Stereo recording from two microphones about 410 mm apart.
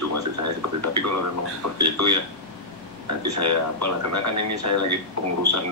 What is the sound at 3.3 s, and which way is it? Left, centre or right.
Speech, right.